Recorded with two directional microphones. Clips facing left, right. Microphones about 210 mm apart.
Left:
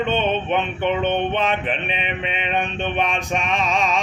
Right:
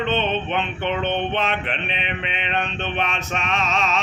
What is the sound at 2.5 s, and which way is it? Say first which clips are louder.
Speech: left 2 dB; 10° left (ahead or behind).